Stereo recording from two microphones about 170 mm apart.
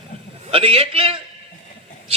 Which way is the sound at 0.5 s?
35° right (ahead or behind).